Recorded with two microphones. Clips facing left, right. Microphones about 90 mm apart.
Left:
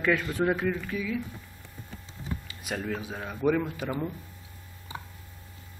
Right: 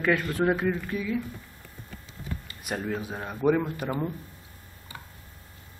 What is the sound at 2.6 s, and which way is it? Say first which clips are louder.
A man's voice: right 2 dB; 10° right (ahead or behind).